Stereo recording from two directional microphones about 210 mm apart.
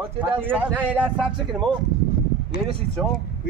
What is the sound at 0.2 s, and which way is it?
Speech, 5° right (ahead or behind).